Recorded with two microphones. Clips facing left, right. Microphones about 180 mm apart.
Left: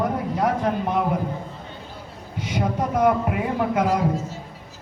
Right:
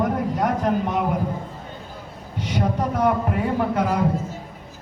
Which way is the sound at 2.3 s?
10° left (ahead or behind).